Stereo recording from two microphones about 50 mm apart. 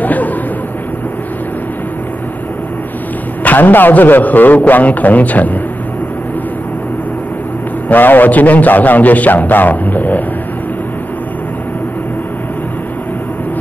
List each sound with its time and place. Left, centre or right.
0.0 s a sound: left
3.4 s a man's voice: left
7.9 s a man's voice: left